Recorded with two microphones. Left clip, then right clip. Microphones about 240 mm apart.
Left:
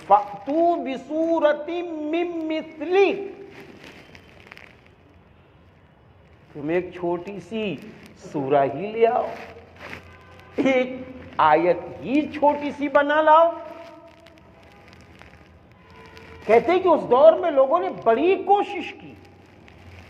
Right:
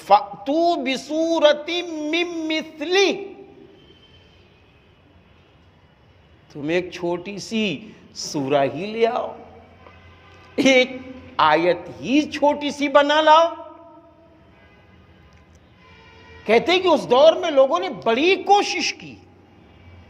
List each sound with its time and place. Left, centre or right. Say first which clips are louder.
0.1 s a man's voice: right 2 dB; right
2.0 s a man's voice: right 2 dB; right
2.3 s a man's voice: right 2 dB; right
6.6 s a man's voice: right 2 dB; right
10.5 s a man's voice: right 5 dB; right
11.3 s a man's voice: right 1 dB; right
16.5 s a man's voice: even; right